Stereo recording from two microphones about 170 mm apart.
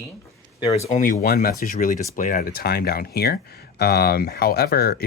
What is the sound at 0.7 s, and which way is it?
Speech, 40° left (ahead or behind).